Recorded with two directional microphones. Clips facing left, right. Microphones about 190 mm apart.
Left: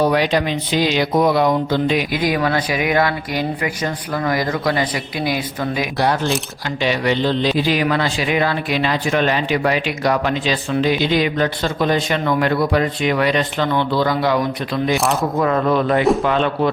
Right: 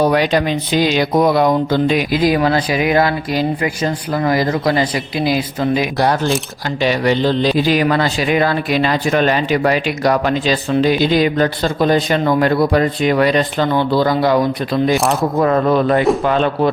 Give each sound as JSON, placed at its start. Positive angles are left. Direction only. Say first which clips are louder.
{"t": 0.0, "sound": "speech", "louder": "right 2 dB", "side_deg": -45}
{"t": 2.1, "sound": "speech", "louder": "right 4 dB", "side_deg": -30}
{"t": 6.8, "sound": "speech", "louder": "right 3 dB", "side_deg": -40}
{"t": 14.9, "sound": "speech", "louder": "right 3 dB", "side_deg": 0}
{"t": 15.4, "sound": "speech", "louder": "right 4 dB", "side_deg": -40}